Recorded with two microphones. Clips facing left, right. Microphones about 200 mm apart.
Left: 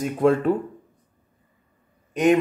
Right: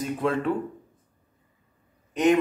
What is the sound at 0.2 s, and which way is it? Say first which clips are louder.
Speech: left 7 dB; 45° left (ahead or behind).